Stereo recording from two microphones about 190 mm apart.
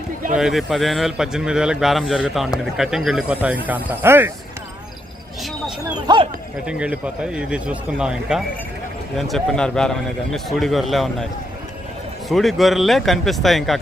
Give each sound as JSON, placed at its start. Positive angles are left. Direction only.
{"t": 0.3, "sound": "a man's voice", "side_deg": 0}
{"t": 6.1, "sound": "speech", "side_deg": -20}
{"t": 6.7, "sound": "a man's voice", "side_deg": -5}
{"t": 12.3, "sound": "a man's voice", "side_deg": 0}